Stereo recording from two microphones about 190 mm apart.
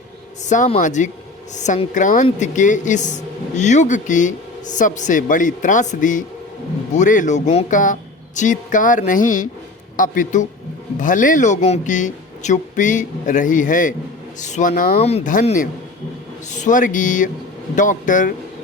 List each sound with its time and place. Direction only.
0.4 s a man's voice: 40° left (ahead or behind)
15.0 s speech: 40° left (ahead or behind)